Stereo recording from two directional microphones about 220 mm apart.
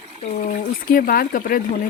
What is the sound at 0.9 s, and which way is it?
Speech, 40° left (ahead or behind).